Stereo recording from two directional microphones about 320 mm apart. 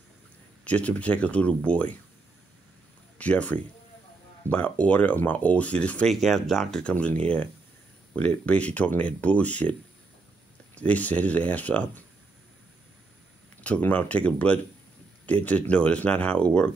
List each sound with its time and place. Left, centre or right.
0.7 s speech: centre
3.2 s speech: centre
13.6 s speech: centre